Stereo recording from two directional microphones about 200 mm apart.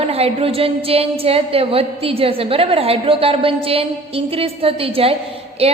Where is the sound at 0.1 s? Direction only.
30° right (ahead or behind).